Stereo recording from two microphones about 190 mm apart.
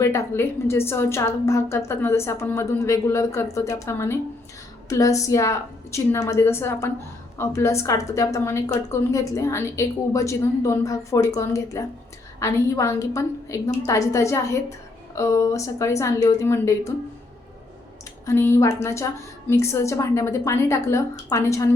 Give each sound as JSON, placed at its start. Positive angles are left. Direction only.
{"t": 0.0, "sound": "a woman's voice", "side_deg": 15}
{"t": 18.3, "sound": "a woman's voice", "side_deg": 15}